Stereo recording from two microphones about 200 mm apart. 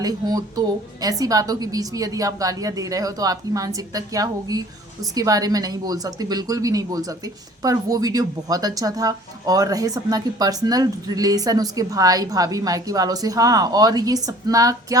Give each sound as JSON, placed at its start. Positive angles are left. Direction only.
{"t": 0.0, "sound": "speech", "side_deg": -20}